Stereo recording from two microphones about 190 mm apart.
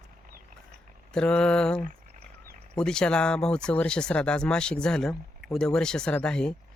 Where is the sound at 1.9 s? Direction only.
45° right (ahead or behind).